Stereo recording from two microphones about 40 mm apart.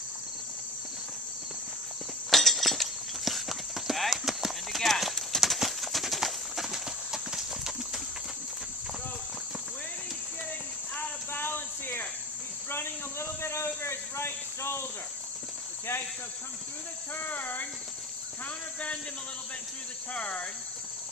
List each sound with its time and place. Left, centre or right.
2.3 s clip-clop: centre
11.3 s a sound: left
12.7 s a sound: left
17.2 s cricket: left
18.4 s cricket: left
20.1 s cricket: left